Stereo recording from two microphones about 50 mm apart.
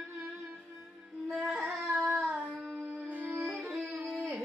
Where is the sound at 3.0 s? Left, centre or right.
Right.